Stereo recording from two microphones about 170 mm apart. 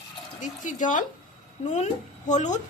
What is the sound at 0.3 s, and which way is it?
A woman's voice, 50° left (ahead or behind).